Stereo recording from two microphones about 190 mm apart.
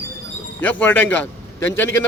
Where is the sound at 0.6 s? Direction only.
10° left (ahead or behind).